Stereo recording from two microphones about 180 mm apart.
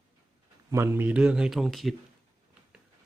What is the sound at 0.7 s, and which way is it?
Speech, 15° right (ahead or behind).